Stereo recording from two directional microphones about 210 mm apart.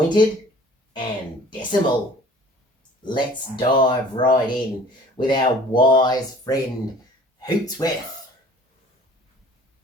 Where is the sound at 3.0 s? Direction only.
20° left (ahead or behind).